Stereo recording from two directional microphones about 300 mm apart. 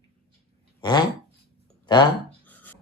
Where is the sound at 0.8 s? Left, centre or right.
Centre.